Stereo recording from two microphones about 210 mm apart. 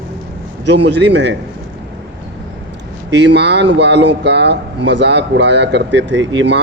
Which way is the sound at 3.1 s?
55° right (ahead or behind).